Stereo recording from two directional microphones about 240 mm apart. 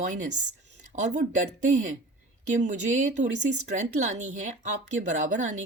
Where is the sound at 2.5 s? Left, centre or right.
Right.